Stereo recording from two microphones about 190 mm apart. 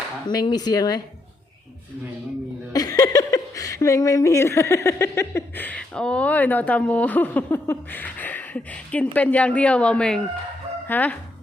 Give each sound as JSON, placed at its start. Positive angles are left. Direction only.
{"t": 0.3, "sound": "speech", "side_deg": 20}
{"t": 2.7, "sound": "speech", "side_deg": 20}